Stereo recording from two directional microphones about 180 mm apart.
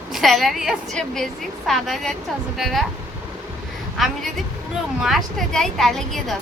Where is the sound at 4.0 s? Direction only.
Centre (ahead or behind).